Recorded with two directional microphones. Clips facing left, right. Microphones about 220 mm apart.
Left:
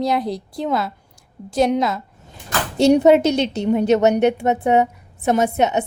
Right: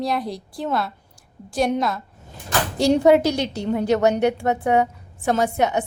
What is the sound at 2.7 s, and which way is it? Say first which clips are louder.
A woman's voice: left 3 dB; 20° left (ahead or behind).